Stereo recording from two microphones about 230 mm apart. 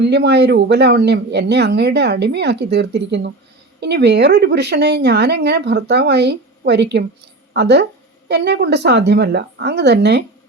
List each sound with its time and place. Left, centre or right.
0.0 s speech: right